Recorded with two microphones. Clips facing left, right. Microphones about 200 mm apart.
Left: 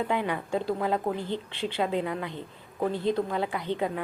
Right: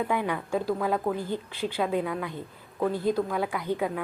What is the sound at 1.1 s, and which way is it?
A woman's voice, 10° right (ahead or behind).